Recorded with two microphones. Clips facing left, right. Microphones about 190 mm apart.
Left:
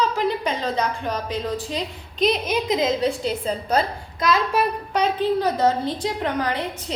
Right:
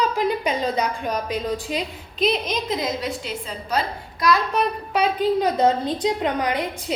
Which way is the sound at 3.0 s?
35° left (ahead or behind).